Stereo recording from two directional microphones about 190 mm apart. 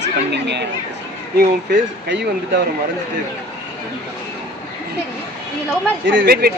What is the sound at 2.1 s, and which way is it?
Speech, 60° right (ahead or behind).